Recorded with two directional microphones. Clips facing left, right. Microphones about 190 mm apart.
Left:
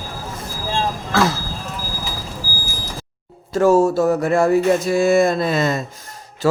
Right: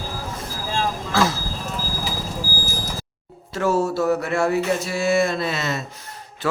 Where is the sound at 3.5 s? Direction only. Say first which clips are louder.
Left 7 dB; 45° left (ahead or behind).